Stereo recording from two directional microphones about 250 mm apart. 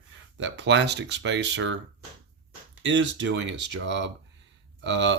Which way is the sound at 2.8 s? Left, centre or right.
Right.